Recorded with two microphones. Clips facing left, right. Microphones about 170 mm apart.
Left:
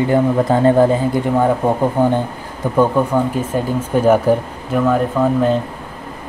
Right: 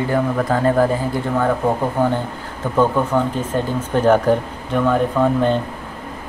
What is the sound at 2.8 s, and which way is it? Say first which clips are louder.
Speech: left 2 dB; 10° left (ahead or behind).